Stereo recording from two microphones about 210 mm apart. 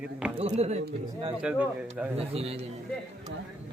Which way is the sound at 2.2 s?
30° right (ahead or behind).